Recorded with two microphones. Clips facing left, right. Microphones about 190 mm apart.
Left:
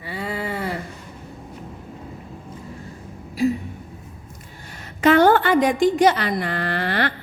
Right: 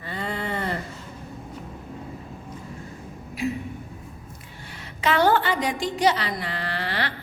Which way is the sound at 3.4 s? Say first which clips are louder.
Left 7 dB; 35° left (ahead or behind).